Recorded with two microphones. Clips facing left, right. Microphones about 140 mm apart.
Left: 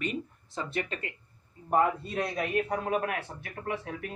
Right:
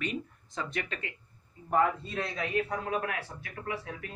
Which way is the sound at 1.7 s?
50° left (ahead or behind).